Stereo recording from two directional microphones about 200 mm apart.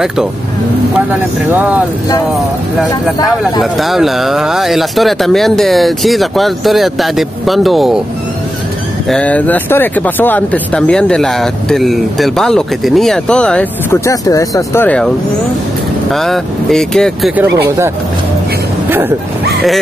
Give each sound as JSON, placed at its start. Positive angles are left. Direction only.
{"t": 1.5, "sound": "speech", "side_deg": -10}
{"t": 2.9, "sound": "speech", "side_deg": 20}
{"t": 3.7, "sound": "speech", "side_deg": 0}
{"t": 9.1, "sound": "speech", "side_deg": 5}
{"t": 16.1, "sound": "speech", "side_deg": 0}
{"t": 17.6, "sound": "speech", "side_deg": -15}
{"t": 18.9, "sound": "bow-wow", "side_deg": -10}